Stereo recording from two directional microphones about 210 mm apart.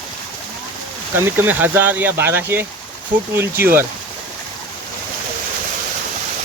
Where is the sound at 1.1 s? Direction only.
10° right (ahead or behind).